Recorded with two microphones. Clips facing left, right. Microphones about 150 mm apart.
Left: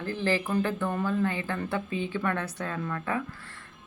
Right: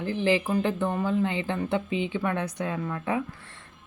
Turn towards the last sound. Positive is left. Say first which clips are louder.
# right 3 dB
turn(degrees=-20)  # may be behind; listen again after turning